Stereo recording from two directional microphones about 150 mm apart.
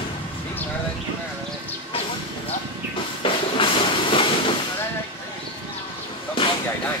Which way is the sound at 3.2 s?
35° left (ahead or behind).